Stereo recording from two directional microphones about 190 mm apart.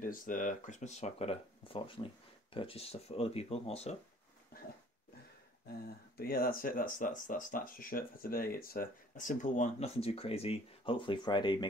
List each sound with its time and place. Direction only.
0.0 s speech: 45° left (ahead or behind)
5.7 s speech: 50° left (ahead or behind); by 11.6 s 25° left (ahead or behind)